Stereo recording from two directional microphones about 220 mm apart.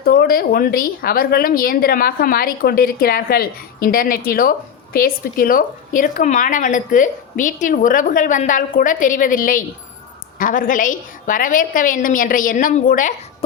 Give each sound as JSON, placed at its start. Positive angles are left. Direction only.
{"t": 0.0, "sound": "speech", "side_deg": 45}